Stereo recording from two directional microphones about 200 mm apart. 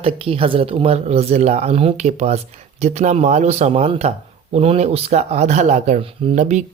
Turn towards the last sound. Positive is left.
turn(degrees=-35)  # may be behind; listen again after turning